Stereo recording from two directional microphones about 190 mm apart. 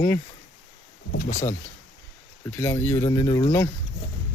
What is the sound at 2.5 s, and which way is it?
Speech, 10° left (ahead or behind).